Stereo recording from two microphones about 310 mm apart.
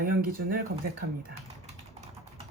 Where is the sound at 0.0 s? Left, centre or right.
Right.